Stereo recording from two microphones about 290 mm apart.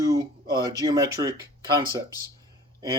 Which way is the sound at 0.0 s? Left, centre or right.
Centre.